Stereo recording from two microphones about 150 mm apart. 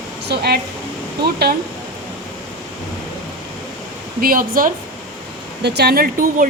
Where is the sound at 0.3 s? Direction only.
90° right.